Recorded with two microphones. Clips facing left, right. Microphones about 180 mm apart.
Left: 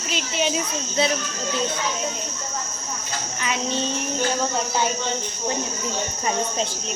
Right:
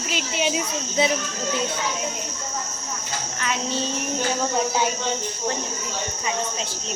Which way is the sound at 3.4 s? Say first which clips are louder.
Left 1 dB; 5° right (ahead or behind).